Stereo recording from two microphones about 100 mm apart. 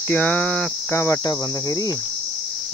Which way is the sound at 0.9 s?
30° left (ahead or behind).